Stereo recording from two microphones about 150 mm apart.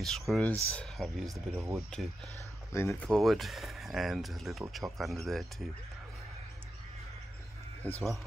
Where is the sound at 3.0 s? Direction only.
Centre (ahead or behind).